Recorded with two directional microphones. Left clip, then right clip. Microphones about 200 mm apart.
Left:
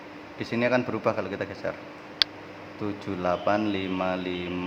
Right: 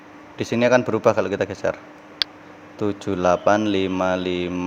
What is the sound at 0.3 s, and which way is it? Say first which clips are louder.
Speech: right 7 dB; 35° right (ahead or behind).